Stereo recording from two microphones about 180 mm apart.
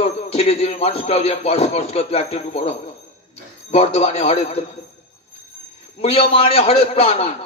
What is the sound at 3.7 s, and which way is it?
Speech, 35° left (ahead or behind).